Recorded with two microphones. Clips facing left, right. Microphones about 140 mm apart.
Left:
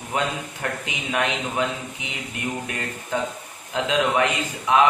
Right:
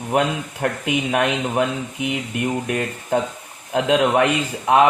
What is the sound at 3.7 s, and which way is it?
Speech, 45° right (ahead or behind).